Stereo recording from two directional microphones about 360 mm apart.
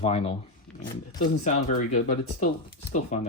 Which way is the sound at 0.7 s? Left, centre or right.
Centre.